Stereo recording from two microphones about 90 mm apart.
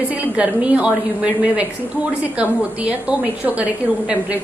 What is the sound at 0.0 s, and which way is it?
A woman's voice, 20° right (ahead or behind).